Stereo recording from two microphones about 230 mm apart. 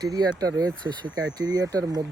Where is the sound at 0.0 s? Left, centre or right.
Centre.